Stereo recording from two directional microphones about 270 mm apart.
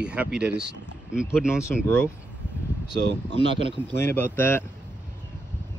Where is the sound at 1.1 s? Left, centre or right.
Centre.